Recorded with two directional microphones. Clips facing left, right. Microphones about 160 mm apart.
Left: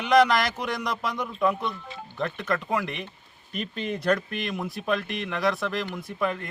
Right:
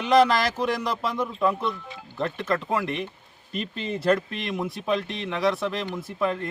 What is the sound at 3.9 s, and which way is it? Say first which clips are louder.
Speech: right 3 dB; centre (ahead or behind).